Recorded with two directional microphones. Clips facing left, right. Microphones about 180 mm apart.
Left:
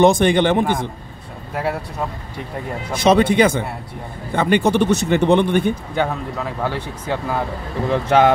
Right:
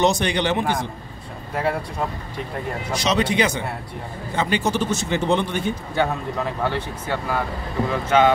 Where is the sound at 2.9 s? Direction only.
55° left (ahead or behind).